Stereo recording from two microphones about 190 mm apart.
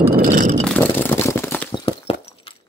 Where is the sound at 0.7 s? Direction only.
10° left (ahead or behind).